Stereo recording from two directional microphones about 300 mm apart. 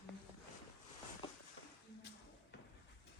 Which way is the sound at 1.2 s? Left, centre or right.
Centre.